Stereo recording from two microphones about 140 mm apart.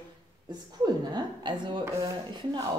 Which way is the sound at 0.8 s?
30° right (ahead or behind).